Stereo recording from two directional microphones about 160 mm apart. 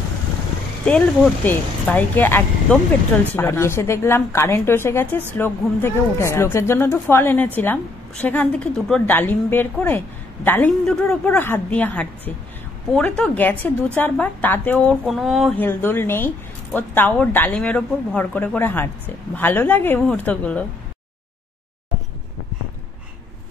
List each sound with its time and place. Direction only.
0.8 s a woman's voice: 5° left (ahead or behind)
15.5 s a woman's voice: 10° left (ahead or behind)